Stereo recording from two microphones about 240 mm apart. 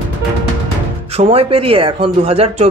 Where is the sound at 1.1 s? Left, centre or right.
Right.